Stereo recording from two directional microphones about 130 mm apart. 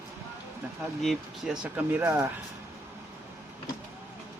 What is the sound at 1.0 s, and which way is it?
Speech, 5° right (ahead or behind).